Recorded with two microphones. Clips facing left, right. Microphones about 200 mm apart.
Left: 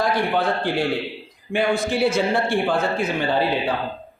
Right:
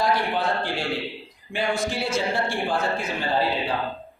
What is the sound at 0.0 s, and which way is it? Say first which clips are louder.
A man's voice: left 3 dB; 55° left (ahead or behind).